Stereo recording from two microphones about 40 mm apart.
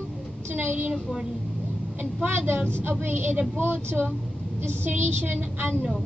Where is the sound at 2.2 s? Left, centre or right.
Right.